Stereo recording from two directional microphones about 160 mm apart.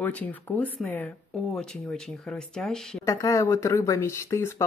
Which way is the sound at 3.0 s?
20° left (ahead or behind).